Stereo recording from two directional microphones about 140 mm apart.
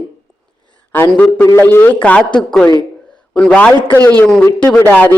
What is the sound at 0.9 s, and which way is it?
Speech, 15° left (ahead or behind).